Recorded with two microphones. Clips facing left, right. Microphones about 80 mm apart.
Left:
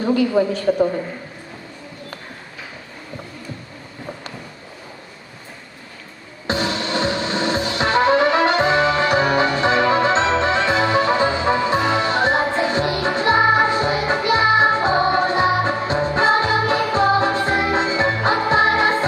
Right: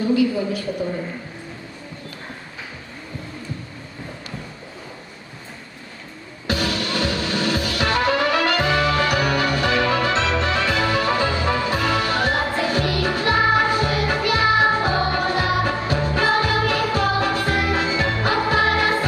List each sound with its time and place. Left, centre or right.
0.0 s a woman's voice: left
6.4 s music: left